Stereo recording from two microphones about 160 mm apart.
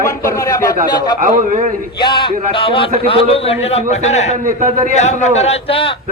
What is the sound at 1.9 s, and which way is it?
A man's voice, 30° left (ahead or behind).